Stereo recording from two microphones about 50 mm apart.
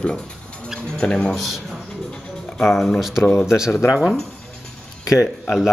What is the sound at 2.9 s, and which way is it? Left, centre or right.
Speech, centre.